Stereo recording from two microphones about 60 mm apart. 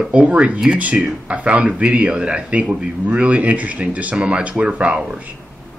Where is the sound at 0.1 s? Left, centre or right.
Right.